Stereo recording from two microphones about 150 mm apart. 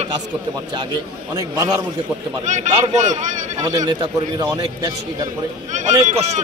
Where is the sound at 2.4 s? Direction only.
55° right (ahead or behind).